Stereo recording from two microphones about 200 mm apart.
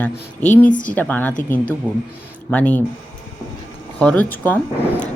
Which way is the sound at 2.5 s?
5° left (ahead or behind).